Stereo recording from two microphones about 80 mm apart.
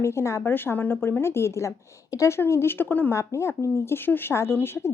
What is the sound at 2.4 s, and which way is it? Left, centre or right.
Speech, left.